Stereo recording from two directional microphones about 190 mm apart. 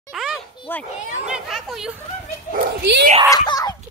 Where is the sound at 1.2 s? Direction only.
5° right (ahead or behind).